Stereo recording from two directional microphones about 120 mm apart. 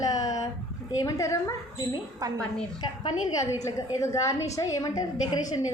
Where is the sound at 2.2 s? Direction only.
30° right (ahead or behind).